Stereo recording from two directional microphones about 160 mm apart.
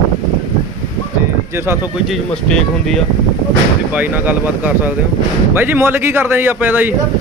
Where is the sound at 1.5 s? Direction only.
15° right (ahead or behind).